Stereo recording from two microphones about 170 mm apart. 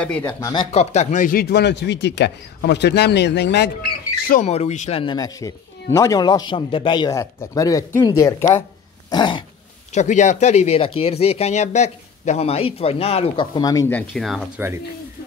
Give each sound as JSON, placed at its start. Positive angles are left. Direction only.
{"t": 0.0, "sound": "speech", "side_deg": 10}
{"t": 0.4, "sound": "speech", "side_deg": 25}
{"t": 0.7, "sound": "speech", "side_deg": 40}
{"t": 4.5, "sound": "speech", "side_deg": 40}
{"t": 5.0, "sound": "speech", "side_deg": 25}
{"t": 9.9, "sound": "speech", "side_deg": 45}
{"t": 13.6, "sound": "speech", "side_deg": 20}
{"t": 13.9, "sound": "speech", "side_deg": 0}